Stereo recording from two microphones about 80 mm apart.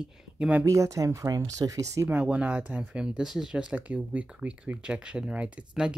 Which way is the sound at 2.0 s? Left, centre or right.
Centre.